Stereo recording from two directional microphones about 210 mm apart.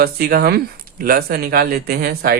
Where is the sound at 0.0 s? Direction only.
45° right (ahead or behind).